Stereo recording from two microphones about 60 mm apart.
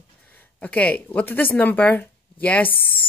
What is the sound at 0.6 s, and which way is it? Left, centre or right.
Speech, left.